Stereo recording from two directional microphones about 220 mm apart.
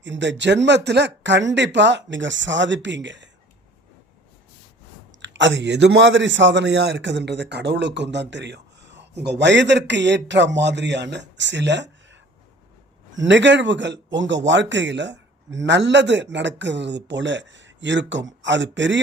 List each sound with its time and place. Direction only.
0.0 s a man's voice: 55° right (ahead or behind)
5.2 s a man's voice: 55° right (ahead or behind)
13.2 s speech: 55° right (ahead or behind)